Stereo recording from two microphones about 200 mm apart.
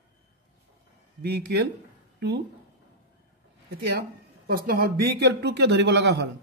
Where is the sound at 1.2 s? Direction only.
55° right (ahead or behind).